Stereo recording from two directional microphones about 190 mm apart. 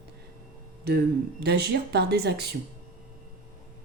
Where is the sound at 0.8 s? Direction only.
60° right (ahead or behind).